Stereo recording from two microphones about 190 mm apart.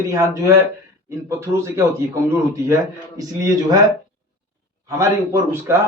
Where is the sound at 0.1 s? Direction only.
15° right (ahead or behind).